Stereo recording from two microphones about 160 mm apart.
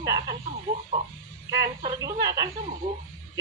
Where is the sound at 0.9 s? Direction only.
40° right (ahead or behind).